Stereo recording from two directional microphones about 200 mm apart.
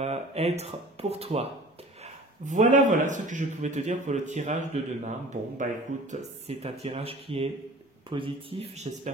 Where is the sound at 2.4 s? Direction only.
40° right (ahead or behind).